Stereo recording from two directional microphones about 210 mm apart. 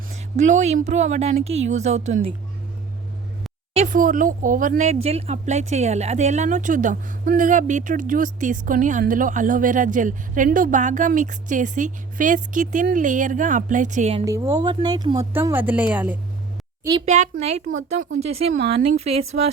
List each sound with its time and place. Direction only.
0.3 s a woman's voice: 35° right (ahead or behind)
3.8 s a woman's voice: 40° right (ahead or behind)
14.3 s speech: 15° right (ahead or behind)
17.1 s a woman's voice: 30° right (ahead or behind)